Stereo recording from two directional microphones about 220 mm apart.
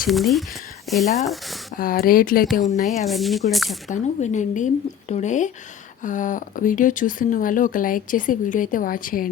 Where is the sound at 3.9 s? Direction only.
30° left (ahead or behind).